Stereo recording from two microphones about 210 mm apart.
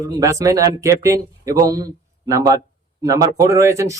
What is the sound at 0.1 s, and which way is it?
Speech, 15° right (ahead or behind).